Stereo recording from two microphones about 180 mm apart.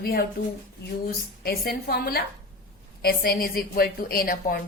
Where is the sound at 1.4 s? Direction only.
55° left (ahead or behind).